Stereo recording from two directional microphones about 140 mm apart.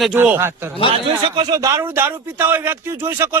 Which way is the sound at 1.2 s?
35° right (ahead or behind).